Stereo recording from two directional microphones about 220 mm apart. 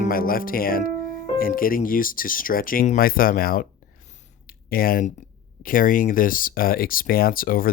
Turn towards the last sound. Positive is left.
turn(degrees=40)  # may be behind; listen again after turning